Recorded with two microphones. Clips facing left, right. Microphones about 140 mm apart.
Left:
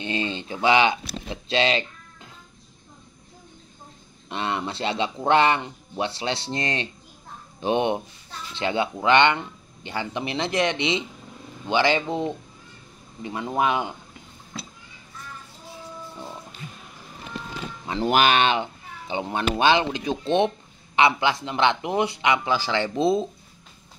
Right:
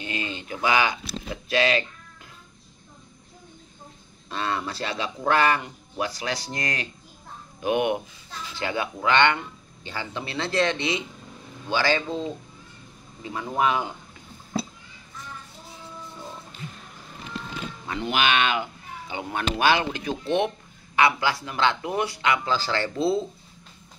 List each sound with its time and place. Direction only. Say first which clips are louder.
0.0 s speech: left 4 dB; 30° left (ahead or behind)
4.3 s speech: left 1 dB; 25° left (ahead or behind)
18.0 s speech: left 4 dB; 40° left (ahead or behind); by 23.2 s 20° left (ahead or behind)